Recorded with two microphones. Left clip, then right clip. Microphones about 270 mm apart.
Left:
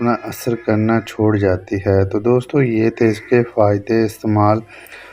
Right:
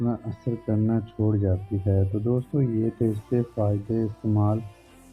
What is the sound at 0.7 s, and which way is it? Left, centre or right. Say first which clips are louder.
Speech: left 11 dB; centre.